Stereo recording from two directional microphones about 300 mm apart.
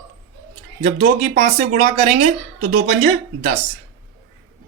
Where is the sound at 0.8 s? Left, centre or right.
Right.